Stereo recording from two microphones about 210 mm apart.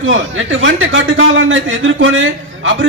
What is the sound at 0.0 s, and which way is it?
A man's voice, 65° right (ahead or behind).